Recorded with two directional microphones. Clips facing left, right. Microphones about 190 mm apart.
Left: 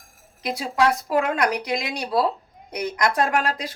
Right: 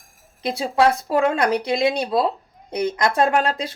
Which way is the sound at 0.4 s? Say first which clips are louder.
Right 3 dB; 30° right (ahead or behind).